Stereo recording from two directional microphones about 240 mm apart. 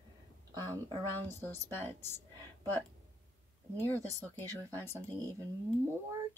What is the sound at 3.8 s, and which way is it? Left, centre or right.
Speech, centre.